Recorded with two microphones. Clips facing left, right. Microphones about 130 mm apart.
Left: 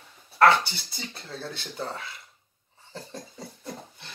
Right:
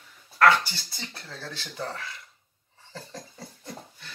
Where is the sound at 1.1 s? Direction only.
25° left (ahead or behind).